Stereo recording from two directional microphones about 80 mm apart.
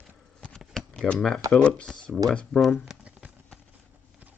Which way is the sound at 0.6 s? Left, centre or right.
Centre.